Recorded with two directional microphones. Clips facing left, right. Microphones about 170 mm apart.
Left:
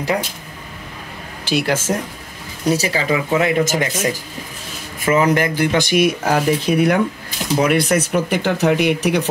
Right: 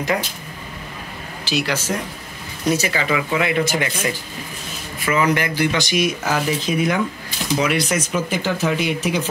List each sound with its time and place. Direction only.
1.4 s speech: 55° left (ahead or behind)
2.7 s speech: 35° left (ahead or behind); by 8.0 s 50° left (ahead or behind)
8.1 s speech: 65° left (ahead or behind)